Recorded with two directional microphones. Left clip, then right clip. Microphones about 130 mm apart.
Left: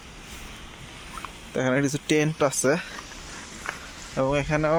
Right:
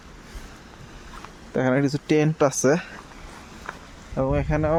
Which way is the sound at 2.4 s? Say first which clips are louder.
Right 3 dB; 65° right (ahead or behind).